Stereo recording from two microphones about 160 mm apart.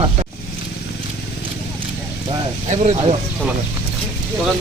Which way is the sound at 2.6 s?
45° right (ahead or behind).